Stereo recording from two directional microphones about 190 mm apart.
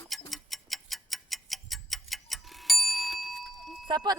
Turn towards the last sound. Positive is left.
turn(degrees=-20)  # may be behind; listen again after turning